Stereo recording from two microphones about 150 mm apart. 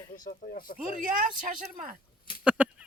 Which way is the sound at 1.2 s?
65° right (ahead or behind).